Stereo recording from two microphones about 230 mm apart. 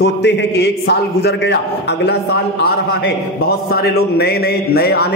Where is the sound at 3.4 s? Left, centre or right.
Left.